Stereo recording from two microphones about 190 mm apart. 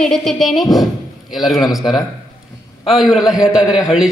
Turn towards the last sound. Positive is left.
turn(degrees=-5)  # may be behind; listen again after turning